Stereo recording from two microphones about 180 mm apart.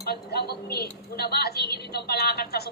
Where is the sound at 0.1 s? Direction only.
60° left (ahead or behind).